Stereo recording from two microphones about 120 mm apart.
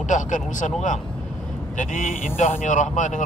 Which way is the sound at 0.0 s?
90° left.